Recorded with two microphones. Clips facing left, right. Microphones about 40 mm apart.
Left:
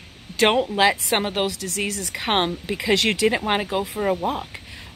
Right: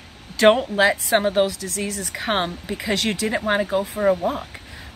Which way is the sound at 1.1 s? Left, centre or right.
Left.